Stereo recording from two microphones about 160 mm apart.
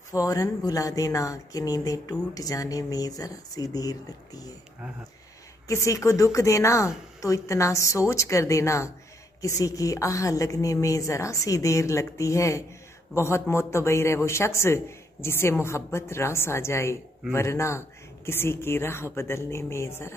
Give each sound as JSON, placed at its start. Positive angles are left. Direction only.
{"t": 0.1, "sound": "speech", "side_deg": 20}
{"t": 5.7, "sound": "a man's voice", "side_deg": 20}